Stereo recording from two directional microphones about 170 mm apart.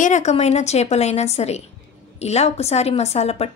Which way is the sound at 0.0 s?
45° left (ahead or behind).